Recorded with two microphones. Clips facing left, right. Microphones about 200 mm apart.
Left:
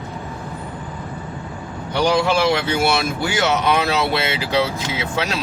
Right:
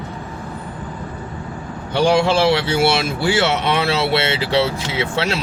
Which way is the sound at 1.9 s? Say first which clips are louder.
Right 2 dB; 25° right (ahead or behind).